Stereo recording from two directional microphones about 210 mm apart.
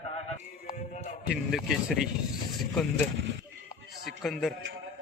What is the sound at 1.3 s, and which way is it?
Speech, centre (ahead or behind).